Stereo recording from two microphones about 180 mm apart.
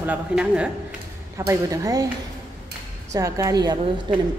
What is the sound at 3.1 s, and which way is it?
Speech, 20° right (ahead or behind).